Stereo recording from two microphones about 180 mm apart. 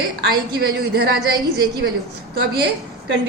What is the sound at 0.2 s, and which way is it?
Speech, 60° right (ahead or behind).